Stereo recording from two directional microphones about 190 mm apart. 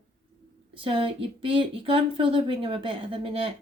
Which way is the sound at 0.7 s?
25° right (ahead or behind).